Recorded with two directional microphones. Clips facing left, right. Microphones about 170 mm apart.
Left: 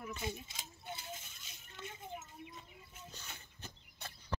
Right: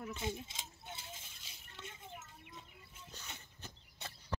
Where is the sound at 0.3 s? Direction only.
25° right (ahead or behind).